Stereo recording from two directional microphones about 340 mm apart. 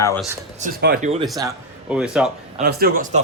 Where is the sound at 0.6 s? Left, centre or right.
Right.